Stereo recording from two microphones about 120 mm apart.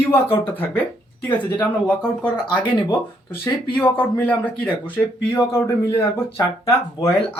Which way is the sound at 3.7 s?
15° left (ahead or behind).